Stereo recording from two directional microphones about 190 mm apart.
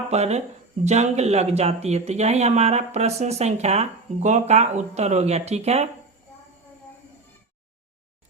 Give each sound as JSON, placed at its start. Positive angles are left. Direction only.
{"t": 0.1, "sound": "speech", "side_deg": -35}